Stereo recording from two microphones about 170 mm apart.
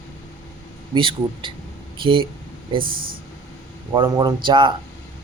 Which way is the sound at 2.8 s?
55° right (ahead or behind).